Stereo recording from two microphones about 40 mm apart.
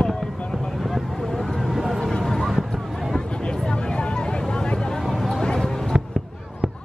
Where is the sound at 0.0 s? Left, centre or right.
Centre.